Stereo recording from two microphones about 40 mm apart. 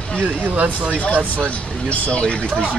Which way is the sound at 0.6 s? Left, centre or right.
Right.